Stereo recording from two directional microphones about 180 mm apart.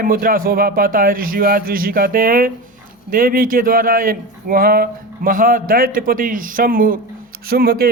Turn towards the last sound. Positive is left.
turn(degrees=-60)  # may be behind; listen again after turning